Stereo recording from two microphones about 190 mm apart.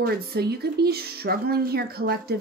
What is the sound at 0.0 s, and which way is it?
Speech, 55° right (ahead or behind).